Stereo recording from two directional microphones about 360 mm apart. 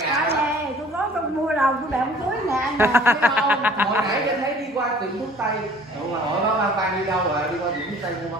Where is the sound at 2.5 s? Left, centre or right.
Centre.